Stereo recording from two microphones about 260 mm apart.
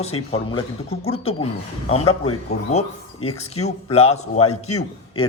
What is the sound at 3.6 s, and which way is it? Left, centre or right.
A man's voice, left.